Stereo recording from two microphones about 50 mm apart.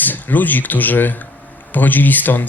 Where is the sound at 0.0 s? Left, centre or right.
Left.